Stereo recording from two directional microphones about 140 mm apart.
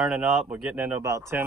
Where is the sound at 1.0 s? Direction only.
20° right (ahead or behind).